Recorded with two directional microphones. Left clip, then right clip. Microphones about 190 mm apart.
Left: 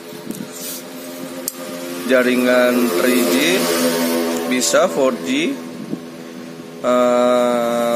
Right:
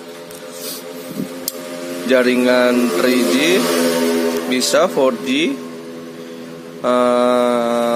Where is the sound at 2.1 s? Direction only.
15° right (ahead or behind).